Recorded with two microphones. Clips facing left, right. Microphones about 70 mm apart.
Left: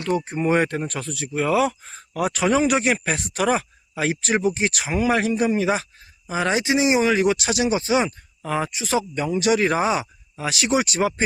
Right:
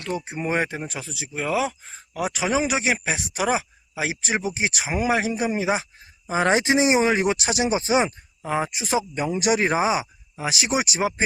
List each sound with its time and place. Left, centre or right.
0.3 s speech: centre
6.2 s speech: right; by 11.1 s centre